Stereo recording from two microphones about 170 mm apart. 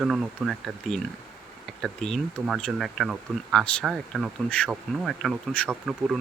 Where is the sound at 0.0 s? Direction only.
5° right (ahead or behind).